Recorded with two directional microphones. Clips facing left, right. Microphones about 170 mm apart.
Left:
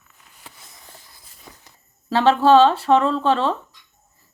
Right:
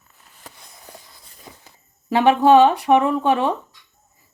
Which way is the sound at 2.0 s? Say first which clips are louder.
Right 1 dB; 15° right (ahead or behind).